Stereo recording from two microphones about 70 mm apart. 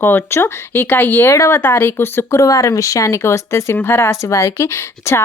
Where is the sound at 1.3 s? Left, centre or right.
Left.